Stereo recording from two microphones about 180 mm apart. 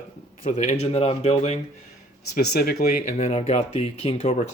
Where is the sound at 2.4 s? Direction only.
60° left (ahead or behind).